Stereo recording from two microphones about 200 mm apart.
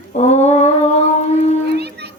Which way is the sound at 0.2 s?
35° left (ahead or behind).